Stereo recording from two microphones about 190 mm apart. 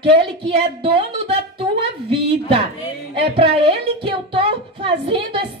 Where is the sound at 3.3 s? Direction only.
25° right (ahead or behind).